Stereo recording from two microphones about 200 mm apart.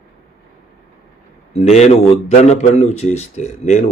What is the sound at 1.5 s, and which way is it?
A man's voice, 35° left (ahead or behind).